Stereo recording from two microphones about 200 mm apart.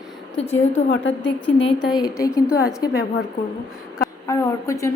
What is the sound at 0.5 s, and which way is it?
Speech, 70° left (ahead or behind).